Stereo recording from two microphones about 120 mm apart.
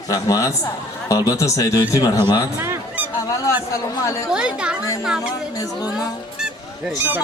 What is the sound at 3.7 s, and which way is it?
Speech, 25° left (ahead or behind).